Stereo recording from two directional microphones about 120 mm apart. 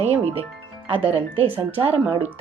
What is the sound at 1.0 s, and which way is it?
Speech, 50° right (ahead or behind).